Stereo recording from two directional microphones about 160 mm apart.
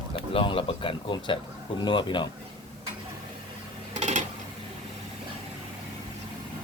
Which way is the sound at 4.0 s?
45° right (ahead or behind).